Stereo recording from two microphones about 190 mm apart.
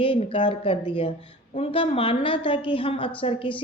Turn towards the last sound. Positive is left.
turn(degrees=25)  # may be behind; listen again after turning